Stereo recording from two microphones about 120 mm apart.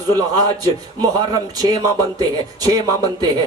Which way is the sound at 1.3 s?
35° right (ahead or behind).